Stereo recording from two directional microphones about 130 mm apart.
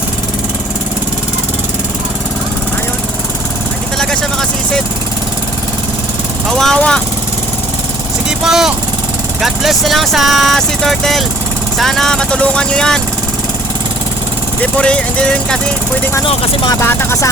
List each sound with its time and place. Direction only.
3.9 s vehicle: 5° left (ahead or behind)
6.5 s speech: 5° left (ahead or behind)
8.4 s speech: 5° right (ahead or behind)
14.6 s speech: 10° left (ahead or behind)
16.8 s speech: 20° left (ahead or behind)